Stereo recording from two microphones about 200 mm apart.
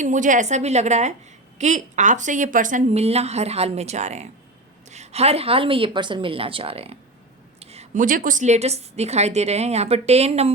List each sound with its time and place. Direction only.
0.0 s a woman's voice: 40° right (ahead or behind)